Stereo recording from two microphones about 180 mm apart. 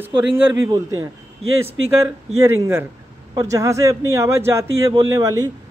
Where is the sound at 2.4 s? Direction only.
15° right (ahead or behind).